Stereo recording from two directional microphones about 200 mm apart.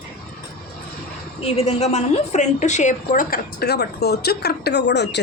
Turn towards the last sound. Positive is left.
turn(degrees=60)  # may be behind; listen again after turning